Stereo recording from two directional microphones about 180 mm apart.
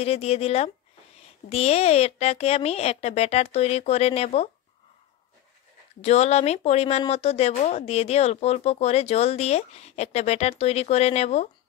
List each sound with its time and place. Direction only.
0.0 s speech: 35° left (ahead or behind)
5.9 s speech: 35° left (ahead or behind)